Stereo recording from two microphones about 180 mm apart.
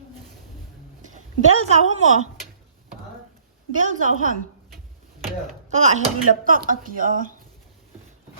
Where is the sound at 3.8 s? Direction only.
45° right (ahead or behind).